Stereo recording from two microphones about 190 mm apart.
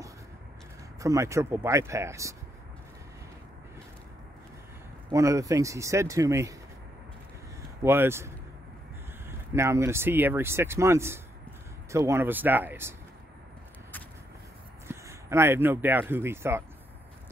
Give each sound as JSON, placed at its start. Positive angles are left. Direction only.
{"t": 0.9, "sound": "speech", "side_deg": -15}
{"t": 5.1, "sound": "speech", "side_deg": -15}
{"t": 7.8, "sound": "speech", "side_deg": -10}
{"t": 9.3, "sound": "speech", "side_deg": -15}
{"t": 14.9, "sound": "speech", "side_deg": -15}